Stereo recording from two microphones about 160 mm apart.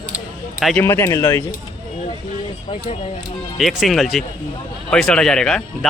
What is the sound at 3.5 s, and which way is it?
Speech, centre (ahead or behind).